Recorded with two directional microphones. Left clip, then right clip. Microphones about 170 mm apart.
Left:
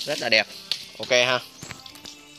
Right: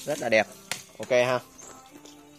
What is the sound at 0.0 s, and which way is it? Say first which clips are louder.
Speech: left 2 dB; 20° right (ahead or behind).